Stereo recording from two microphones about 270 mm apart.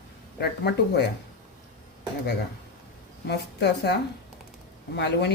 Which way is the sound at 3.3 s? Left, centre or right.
Left.